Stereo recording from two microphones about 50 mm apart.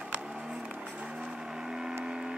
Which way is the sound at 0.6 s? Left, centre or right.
Right.